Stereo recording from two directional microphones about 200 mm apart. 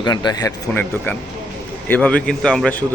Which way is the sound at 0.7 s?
10° left (ahead or behind).